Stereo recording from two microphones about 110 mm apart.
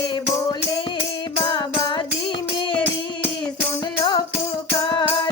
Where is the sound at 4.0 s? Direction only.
40° left (ahead or behind).